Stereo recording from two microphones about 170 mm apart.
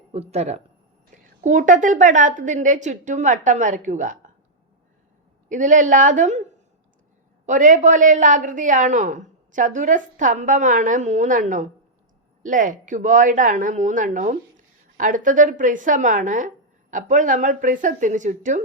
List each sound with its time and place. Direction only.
0.1 s a woman's voice: 40° right (ahead or behind)
5.5 s a woman's voice: 45° right (ahead or behind)
7.4 s a woman's voice: 45° right (ahead or behind)